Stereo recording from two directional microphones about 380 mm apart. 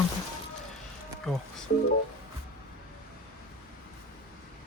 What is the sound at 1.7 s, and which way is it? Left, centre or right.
Speech, left.